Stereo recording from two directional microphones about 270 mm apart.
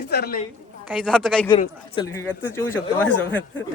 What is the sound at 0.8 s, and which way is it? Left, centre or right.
Speech, centre.